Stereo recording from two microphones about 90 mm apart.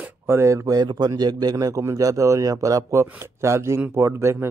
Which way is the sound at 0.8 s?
50° right (ahead or behind).